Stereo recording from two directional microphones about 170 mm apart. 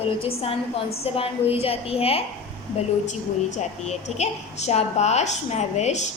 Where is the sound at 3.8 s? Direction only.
40° left (ahead or behind).